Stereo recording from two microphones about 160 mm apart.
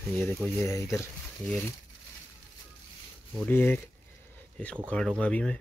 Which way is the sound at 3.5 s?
15° left (ahead or behind).